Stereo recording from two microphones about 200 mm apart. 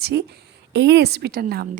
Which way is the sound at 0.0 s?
55° right (ahead or behind).